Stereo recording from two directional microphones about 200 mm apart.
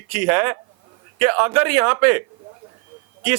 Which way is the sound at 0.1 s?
10° right (ahead or behind).